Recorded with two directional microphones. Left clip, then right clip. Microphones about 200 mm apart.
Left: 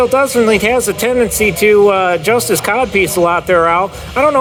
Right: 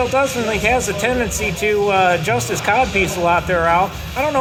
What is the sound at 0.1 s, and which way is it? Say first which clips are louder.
Speech: left 7 dB; 50° left (ahead or behind).